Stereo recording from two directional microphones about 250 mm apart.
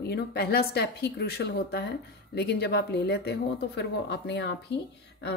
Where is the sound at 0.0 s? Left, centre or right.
Left.